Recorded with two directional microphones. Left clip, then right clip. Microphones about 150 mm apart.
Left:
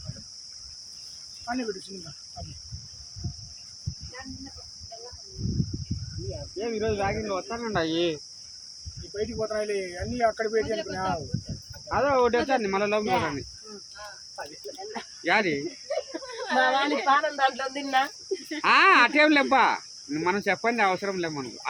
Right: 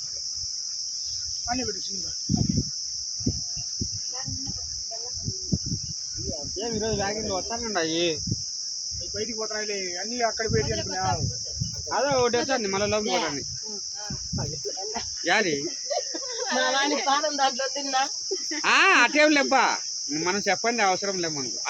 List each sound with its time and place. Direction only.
6.6 s speech: 5° left (ahead or behind)
9.1 s speech: 90° left; by 11.1 s 55° left (ahead or behind)
11.9 s speech: 5° left (ahead or behind)
15.3 s cricket: centre (ahead or behind)
18.6 s cricket: centre (ahead or behind)